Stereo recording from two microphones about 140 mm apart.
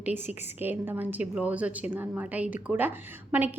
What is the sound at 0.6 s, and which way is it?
A woman's voice, 15° right (ahead or behind).